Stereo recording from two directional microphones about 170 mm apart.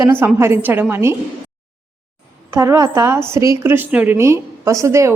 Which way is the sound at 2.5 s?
15° right (ahead or behind).